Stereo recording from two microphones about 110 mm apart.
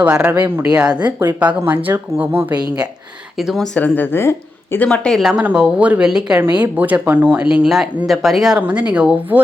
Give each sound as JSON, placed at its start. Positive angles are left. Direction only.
{"t": 0.0, "sound": "speech", "side_deg": -10}
{"t": 3.3, "sound": "speech", "side_deg": 0}
{"t": 3.8, "sound": "speech", "side_deg": 15}
{"t": 4.9, "sound": "speech", "side_deg": 5}
{"t": 5.3, "sound": "speech", "side_deg": -10}